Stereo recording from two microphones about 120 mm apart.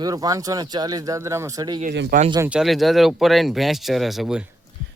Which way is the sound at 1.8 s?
90° right.